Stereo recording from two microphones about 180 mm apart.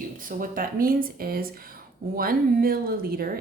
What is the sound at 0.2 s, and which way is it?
Speech, 50° right (ahead or behind).